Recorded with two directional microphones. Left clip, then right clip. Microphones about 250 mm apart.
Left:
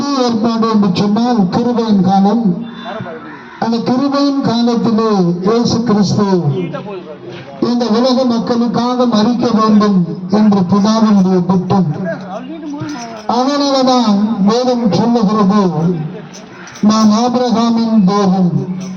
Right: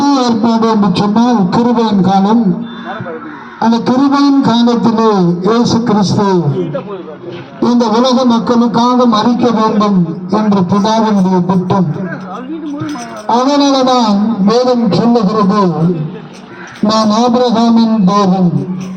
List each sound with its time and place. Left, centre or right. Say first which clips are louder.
0.0 s a sound: right 3 dB; right
3.6 s a man's voice: right 4 dB; right
7.6 s a man's voice: right 3 dB; right
13.2 s a man's voice: right 4 dB; right
16.8 s a man's voice: right 2 dB; right